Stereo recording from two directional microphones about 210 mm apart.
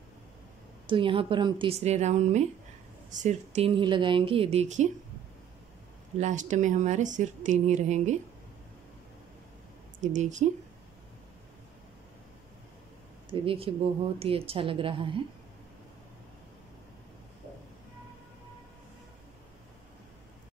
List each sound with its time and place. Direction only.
0.8 s speech: 25° right (ahead or behind)
6.1 s speech: 35° right (ahead or behind)
10.1 s speech: 35° right (ahead or behind)
13.3 s speech: 25° right (ahead or behind)